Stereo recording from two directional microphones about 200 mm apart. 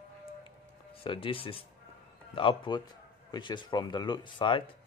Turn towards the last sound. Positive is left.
turn(degrees=25)  # may be behind; listen again after turning